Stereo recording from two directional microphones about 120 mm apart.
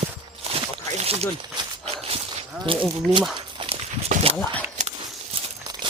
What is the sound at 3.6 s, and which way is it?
Dog, 45° right (ahead or behind).